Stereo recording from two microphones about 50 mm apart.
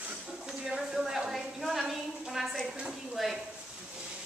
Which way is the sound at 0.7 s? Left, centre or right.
Centre.